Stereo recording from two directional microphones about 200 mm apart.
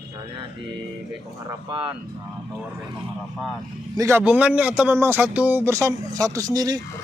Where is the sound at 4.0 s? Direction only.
10° right (ahead or behind).